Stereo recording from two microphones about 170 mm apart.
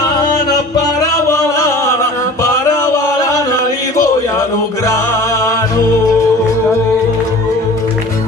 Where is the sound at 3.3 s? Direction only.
20° left (ahead or behind).